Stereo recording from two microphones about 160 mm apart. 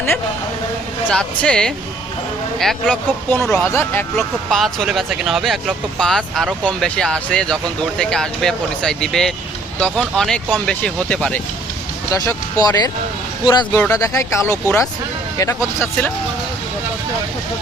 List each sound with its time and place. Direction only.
1.1 s speech: 5° left (ahead or behind)
4.1 s speech: centre (ahead or behind)
12.1 s speech: 20° left (ahead or behind)